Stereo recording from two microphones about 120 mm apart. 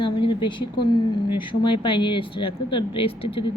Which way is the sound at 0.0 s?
45° left (ahead or behind).